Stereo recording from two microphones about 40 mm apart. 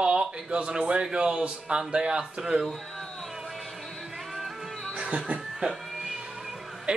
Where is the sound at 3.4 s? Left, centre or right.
Centre.